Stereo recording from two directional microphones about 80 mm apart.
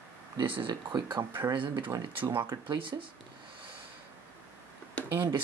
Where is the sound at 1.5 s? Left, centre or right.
Right.